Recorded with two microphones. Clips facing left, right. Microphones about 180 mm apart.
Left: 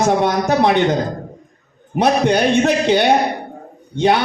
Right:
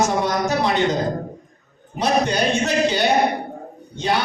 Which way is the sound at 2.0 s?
60° left (ahead or behind).